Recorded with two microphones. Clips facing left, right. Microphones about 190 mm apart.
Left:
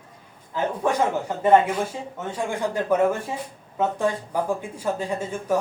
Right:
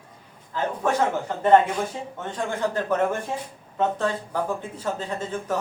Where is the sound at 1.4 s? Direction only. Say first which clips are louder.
Even; 10° left (ahead or behind).